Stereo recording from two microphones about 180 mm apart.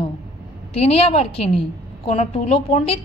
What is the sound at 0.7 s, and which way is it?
A woman's voice, 35° left (ahead or behind).